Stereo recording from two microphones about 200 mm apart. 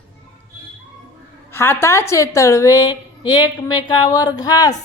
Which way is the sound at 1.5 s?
10° left (ahead or behind).